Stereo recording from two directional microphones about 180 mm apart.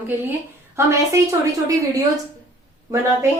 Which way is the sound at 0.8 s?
15° right (ahead or behind).